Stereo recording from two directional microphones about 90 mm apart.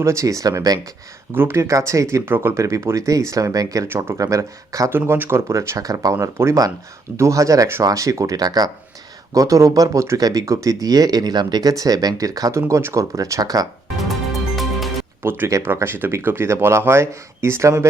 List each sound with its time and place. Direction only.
0.0 s speech: 35° right (ahead or behind)
1.3 s speech: 25° right (ahead or behind)
2.6 s speech: 35° right (ahead or behind)
3.8 s speech: 25° right (ahead or behind)
4.2 s speech: 40° right (ahead or behind)
4.9 s speech: 25° right (ahead or behind); by 13.7 s 45° right (ahead or behind)
14.1 s music: centre (ahead or behind)
15.2 s speech: 25° right (ahead or behind)